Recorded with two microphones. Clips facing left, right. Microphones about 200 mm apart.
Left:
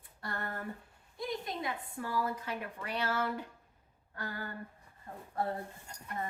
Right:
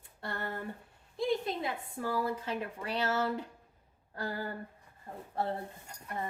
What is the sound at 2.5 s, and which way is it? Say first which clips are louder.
A woman's voice: right 3 dB; 30° right (ahead or behind).